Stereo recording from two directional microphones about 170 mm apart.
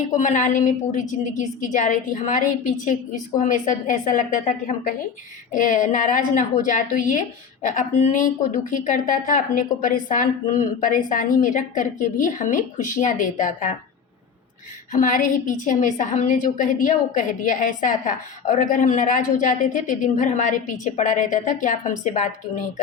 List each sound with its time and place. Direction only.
0.1 s a woman's voice: 45° left (ahead or behind)
14.9 s a woman's voice: 50° left (ahead or behind)